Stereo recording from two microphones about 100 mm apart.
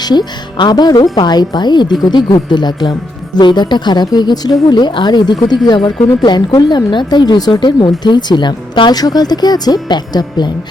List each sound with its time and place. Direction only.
0.0 s a woman's voice: 45° left (ahead or behind)